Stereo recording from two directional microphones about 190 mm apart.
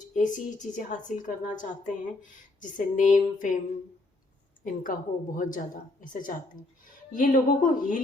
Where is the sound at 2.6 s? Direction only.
45° left (ahead or behind).